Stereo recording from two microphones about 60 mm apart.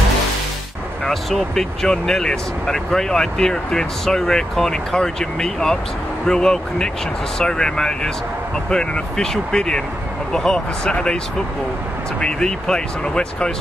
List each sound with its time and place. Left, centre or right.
1.0 s speech: centre
12.2 s speech: centre